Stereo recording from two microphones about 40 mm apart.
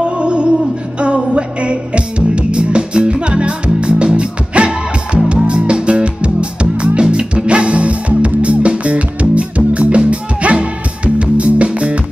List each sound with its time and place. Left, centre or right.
0.0 s music: right